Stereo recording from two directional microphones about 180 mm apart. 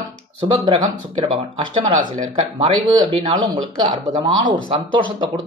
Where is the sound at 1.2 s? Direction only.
25° right (ahead or behind).